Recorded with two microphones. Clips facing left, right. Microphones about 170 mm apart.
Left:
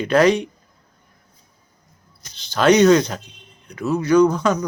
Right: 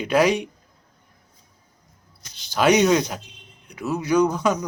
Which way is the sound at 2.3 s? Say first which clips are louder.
Left 3 dB; 10° right (ahead or behind).